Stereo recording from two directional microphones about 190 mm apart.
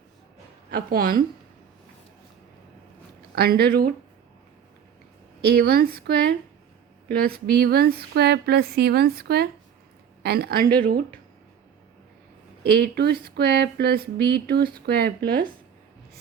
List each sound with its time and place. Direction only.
0.7 s speech: 50° right (ahead or behind)
3.3 s speech: 55° right (ahead or behind)
5.4 s speech: 55° right (ahead or behind)
12.6 s speech: 55° right (ahead or behind)